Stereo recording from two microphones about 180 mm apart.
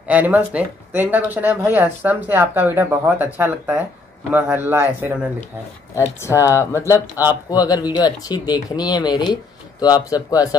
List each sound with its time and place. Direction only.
0.1 s speech: 10° right (ahead or behind)
6.2 s speech: 15° left (ahead or behind)